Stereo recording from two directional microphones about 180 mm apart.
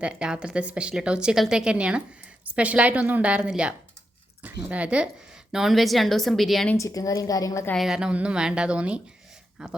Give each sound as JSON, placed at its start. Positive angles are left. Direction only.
{"t": 0.0, "sound": "a woman's voice", "side_deg": -5}
{"t": 6.7, "sound": "a woman's voice", "side_deg": 20}
{"t": 7.7, "sound": "a woman's voice", "side_deg": 0}